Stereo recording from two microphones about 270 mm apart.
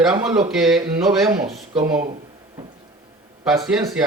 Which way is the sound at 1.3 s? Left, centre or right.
Centre.